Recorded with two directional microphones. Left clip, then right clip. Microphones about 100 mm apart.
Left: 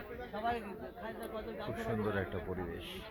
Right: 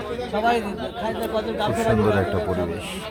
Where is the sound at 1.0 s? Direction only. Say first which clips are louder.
Right 19 dB; centre (ahead or behind).